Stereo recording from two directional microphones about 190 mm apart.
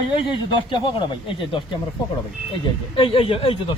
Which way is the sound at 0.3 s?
25° left (ahead or behind).